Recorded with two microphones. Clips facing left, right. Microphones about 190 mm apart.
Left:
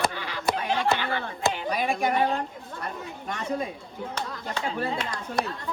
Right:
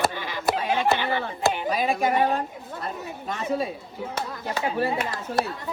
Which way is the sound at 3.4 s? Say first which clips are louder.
Right 3 dB; 5° right (ahead or behind).